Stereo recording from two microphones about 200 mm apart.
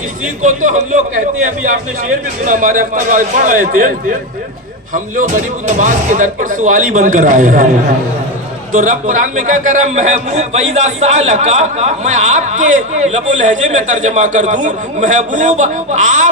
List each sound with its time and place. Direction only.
0.4 s a man's voice: 40° right (ahead or behind)
4.9 s a man's voice: 40° right (ahead or behind)
8.7 s a man's voice: 40° right (ahead or behind)